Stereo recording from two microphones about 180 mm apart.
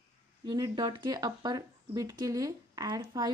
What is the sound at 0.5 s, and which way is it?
A woman's voice, 20° right (ahead or behind).